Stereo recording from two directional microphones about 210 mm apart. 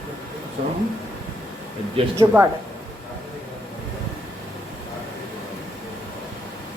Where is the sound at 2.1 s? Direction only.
15° right (ahead or behind).